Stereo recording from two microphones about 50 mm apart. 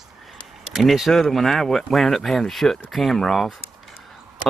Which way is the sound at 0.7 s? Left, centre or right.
Centre.